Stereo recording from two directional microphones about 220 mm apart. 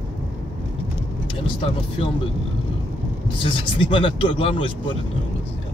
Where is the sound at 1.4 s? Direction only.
25° left (ahead or behind).